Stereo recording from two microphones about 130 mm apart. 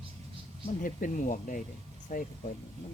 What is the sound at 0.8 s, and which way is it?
Speech, 90° left.